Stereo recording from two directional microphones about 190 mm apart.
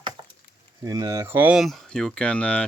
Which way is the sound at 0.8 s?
15° right (ahead or behind).